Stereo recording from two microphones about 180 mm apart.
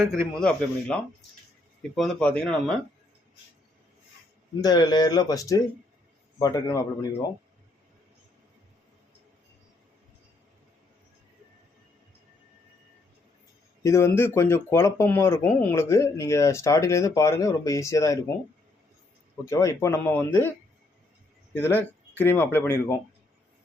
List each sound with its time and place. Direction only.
0.1 s a man's voice: 5° left (ahead or behind)
2.0 s a man's voice: 5° left (ahead or behind)
4.6 s speech: 20° left (ahead or behind)
13.8 s speech: 15° left (ahead or behind)
19.5 s speech: 15° left (ahead or behind)
21.5 s speech: 10° left (ahead or behind)